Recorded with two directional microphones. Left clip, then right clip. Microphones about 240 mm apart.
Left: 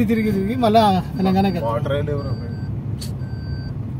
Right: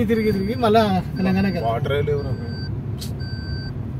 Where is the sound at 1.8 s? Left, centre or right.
Right.